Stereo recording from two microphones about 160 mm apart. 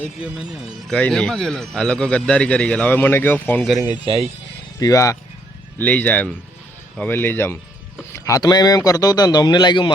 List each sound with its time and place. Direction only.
0.2 s speech: 5° right (ahead or behind)
0.9 s a man's voice: 5° left (ahead or behind)
4.0 s speech: 35° right (ahead or behind)
4.8 s a man's voice: 20° left (ahead or behind)
5.8 s a man's voice: 10° left (ahead or behind); by 9.9 s 30° left (ahead or behind)